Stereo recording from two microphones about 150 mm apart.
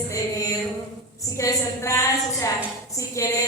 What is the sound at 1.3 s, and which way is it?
A woman's voice, 20° left (ahead or behind).